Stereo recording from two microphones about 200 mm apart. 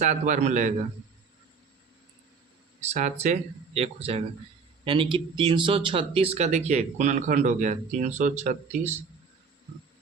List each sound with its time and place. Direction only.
0.0 s speech: 35° right (ahead or behind)
2.8 s speech: 35° right (ahead or behind)